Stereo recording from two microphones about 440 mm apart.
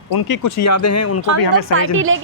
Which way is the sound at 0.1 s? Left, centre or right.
Left.